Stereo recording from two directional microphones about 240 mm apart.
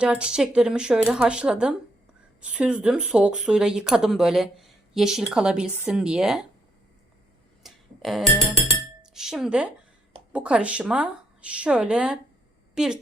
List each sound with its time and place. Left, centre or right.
0.0 s speech: centre
7.6 s a sound: centre
9.1 s a woman's voice: centre